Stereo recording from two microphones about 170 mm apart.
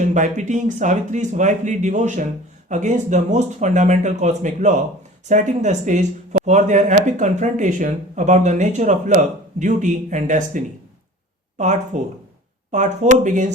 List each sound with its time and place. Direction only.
0.0 s speech: 45° right (ahead or behind)